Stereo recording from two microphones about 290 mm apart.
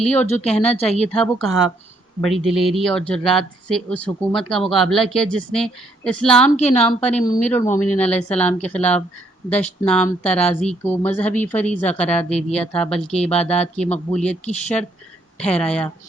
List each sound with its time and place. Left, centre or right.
0.0 s speech: centre
1.5 s speech: right
2.2 s speech: centre
6.6 s speech: left
7.3 s speech: centre